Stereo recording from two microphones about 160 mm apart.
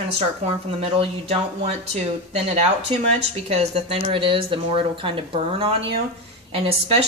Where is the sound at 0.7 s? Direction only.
35° right (ahead or behind).